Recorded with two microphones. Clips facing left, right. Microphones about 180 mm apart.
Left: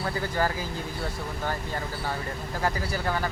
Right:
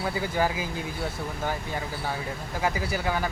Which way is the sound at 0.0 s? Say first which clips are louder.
Right 1 dB; 10° right (ahead or behind).